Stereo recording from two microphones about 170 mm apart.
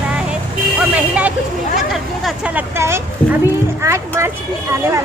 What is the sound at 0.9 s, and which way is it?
Speech, 10° right (ahead or behind).